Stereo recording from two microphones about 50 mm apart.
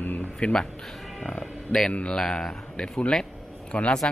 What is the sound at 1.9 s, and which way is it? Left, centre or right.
Speech, left.